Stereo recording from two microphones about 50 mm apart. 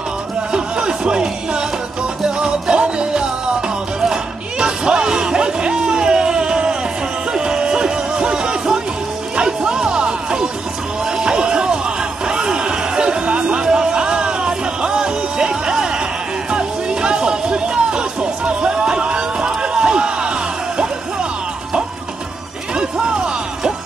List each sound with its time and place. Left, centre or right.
0.5 s music: centre
23.0 s music: centre